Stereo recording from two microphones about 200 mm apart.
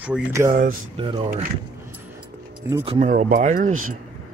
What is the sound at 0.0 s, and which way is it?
Speech, 10° right (ahead or behind).